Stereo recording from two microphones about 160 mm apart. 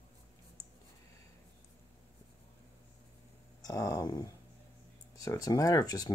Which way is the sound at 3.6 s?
20° left (ahead or behind).